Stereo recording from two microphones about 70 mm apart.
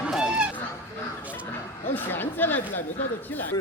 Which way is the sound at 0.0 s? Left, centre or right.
Centre.